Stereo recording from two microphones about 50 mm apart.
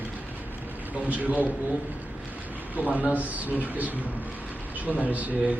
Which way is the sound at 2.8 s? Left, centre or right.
Left.